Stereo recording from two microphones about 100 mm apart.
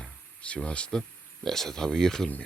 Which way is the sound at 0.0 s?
10° left (ahead or behind).